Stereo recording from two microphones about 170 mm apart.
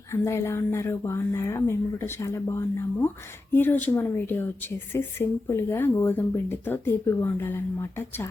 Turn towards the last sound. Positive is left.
turn(degrees=15)  # may be behind; listen again after turning